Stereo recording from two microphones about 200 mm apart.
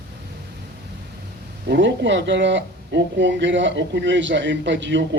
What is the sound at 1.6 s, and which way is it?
Speech, 55° right (ahead or behind).